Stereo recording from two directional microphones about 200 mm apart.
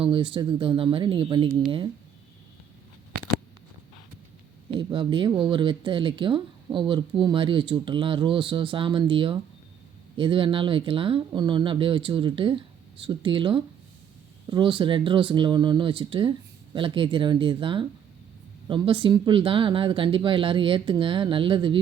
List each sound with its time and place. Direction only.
0.0 s speech: 25° right (ahead or behind)
4.7 s speech: 25° right (ahead or behind)